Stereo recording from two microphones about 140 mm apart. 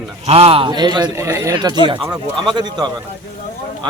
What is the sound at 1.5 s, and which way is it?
A man's voice, 30° right (ahead or behind).